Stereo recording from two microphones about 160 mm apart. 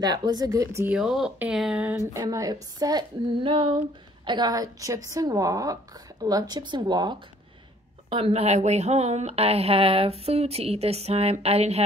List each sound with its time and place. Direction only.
0.0 s speech: 25° right (ahead or behind)
0.9 s a woman's voice: 5° right (ahead or behind); by 11.8 s 40° right (ahead or behind)